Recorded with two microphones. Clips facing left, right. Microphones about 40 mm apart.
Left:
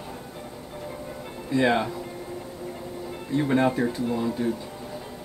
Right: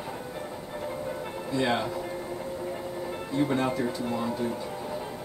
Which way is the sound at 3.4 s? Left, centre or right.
Left.